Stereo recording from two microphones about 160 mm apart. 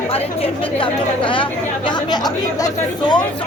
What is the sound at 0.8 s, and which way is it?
Speech, 30° left (ahead or behind).